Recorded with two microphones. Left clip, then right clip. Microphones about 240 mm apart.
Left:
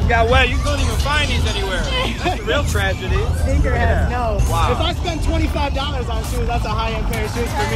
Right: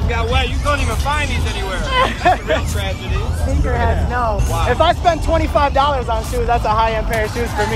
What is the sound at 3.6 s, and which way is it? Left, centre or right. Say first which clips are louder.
Speech: right 1 dB; centre.